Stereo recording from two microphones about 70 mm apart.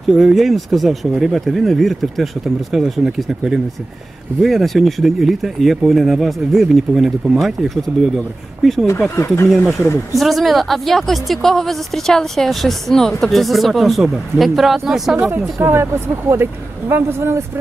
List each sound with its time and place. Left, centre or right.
0.1 s speech: centre
9.1 s speech: left
10.1 s speech: centre
15.6 s speech: right